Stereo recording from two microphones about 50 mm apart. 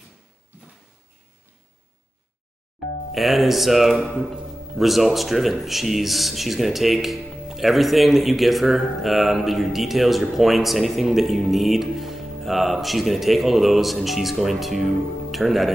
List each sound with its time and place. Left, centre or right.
3.1 s speech: centre